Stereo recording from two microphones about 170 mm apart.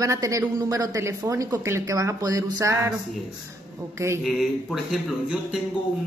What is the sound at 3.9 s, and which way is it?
Speech, 15° right (ahead or behind).